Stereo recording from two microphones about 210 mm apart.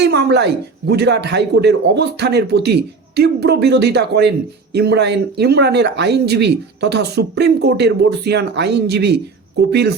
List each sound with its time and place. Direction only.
0.0 s a man's voice: 50° right (ahead or behind)